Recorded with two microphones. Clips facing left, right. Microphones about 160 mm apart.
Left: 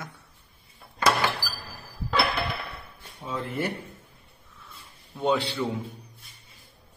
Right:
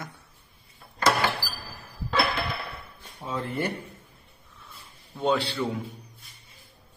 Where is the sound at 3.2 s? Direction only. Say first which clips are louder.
Right 1 dB; centre (ahead or behind).